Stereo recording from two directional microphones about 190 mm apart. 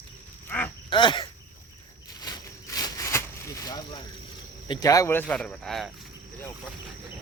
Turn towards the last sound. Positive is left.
turn(degrees=0)  # may be behind; listen again after turning